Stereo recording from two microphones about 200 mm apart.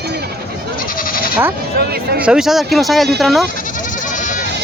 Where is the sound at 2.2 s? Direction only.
5° right (ahead or behind).